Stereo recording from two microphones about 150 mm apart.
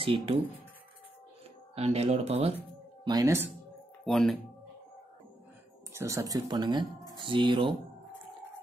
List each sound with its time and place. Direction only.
0.0 s speech: 40° right (ahead or behind)
1.8 s speech: 45° right (ahead or behind)
3.1 s speech: 20° right (ahead or behind)
4.0 s speech: centre (ahead or behind)
5.9 s speech: 20° right (ahead or behind)